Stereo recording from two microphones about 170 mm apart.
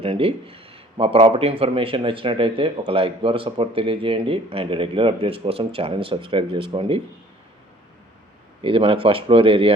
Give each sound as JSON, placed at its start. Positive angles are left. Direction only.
{"t": 0.0, "sound": "a man's voice", "side_deg": -35}
{"t": 8.6, "sound": "a man's voice", "side_deg": -30}